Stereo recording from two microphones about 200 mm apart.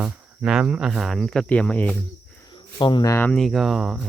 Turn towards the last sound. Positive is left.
turn(degrees=0)  # may be behind; listen again after turning